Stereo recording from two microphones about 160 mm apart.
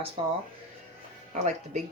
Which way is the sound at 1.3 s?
45° right (ahead or behind).